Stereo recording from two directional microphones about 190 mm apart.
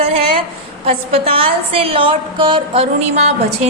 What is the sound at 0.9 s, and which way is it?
A woman's voice, 30° right (ahead or behind).